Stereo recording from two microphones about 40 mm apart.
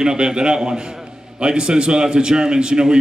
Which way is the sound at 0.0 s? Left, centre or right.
Centre.